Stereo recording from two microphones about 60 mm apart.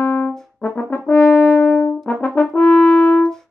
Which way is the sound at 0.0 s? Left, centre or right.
Left.